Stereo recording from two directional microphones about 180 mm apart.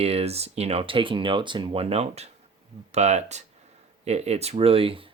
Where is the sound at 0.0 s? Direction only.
35° right (ahead or behind).